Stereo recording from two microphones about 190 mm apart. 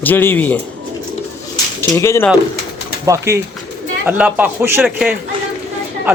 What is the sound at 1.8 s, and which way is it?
Speech, 10° left (ahead or behind).